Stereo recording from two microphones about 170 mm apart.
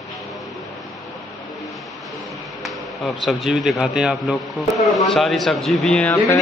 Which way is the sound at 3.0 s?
Centre (ahead or behind).